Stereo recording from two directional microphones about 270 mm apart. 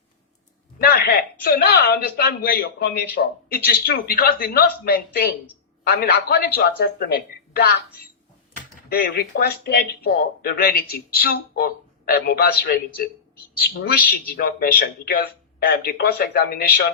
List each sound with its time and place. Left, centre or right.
0.8 s speech: left
8.9 s speech: left